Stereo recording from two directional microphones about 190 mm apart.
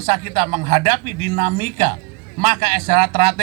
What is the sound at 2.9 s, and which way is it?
Speech, 30° right (ahead or behind).